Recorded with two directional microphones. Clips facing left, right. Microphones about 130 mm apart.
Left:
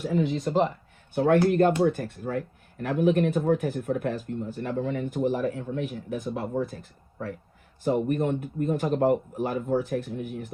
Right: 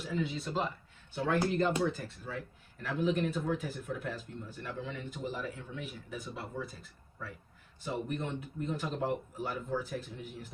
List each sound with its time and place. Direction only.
0.0 s speech: 50° left (ahead or behind)